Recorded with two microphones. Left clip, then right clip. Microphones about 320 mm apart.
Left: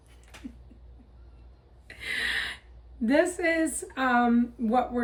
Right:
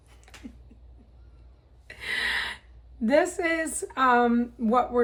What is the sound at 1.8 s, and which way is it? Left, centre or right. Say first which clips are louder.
Filing: right 2 dB; centre.